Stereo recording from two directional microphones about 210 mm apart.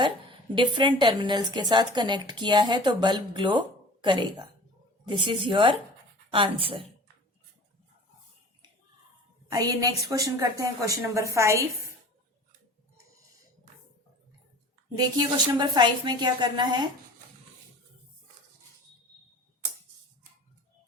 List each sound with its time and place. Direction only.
0.5 s a woman's voice: 20° right (ahead or behind)
9.5 s a woman's voice: 15° right (ahead or behind)
14.9 s a woman's voice: 20° right (ahead or behind)